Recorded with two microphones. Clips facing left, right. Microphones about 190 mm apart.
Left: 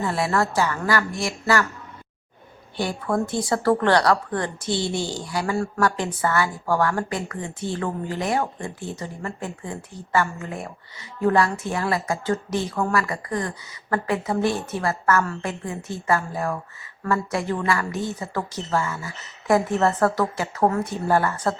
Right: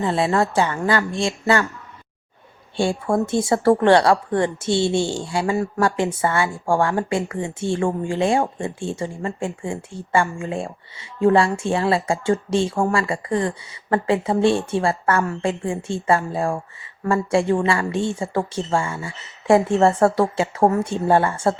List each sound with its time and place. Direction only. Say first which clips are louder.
0.0 s a woman's voice: right 3 dB; 20° right (ahead or behind)
2.7 s a woman's voice: right 4 dB; 25° right (ahead or behind)